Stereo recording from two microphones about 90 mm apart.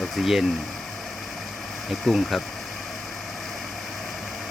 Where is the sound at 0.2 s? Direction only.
5° right (ahead or behind).